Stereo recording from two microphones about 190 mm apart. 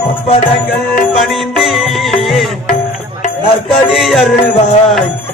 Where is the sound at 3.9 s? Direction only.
Centre (ahead or behind).